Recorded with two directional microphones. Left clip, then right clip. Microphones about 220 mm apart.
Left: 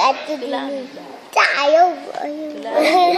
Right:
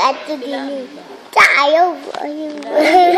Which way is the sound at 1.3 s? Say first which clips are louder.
Right 3 dB; 20° right (ahead or behind).